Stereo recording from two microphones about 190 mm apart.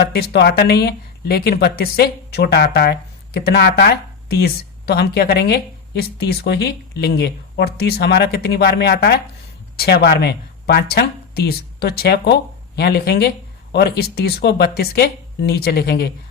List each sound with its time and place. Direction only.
0.0 s speech: 55° left (ahead or behind)